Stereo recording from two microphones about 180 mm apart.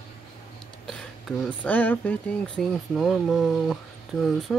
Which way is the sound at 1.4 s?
10° left (ahead or behind).